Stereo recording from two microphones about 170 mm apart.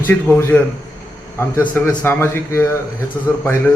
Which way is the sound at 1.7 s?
10° left (ahead or behind).